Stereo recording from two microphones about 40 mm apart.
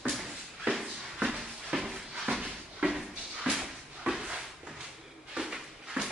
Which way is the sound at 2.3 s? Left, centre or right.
Right.